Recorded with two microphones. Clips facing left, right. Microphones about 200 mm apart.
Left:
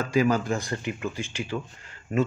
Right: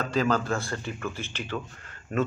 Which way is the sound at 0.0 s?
10° left (ahead or behind).